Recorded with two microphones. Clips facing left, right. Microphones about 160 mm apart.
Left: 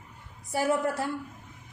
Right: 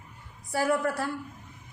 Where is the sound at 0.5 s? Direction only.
20° left (ahead or behind).